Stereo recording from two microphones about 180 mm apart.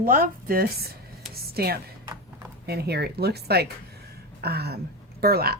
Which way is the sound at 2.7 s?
65° right (ahead or behind).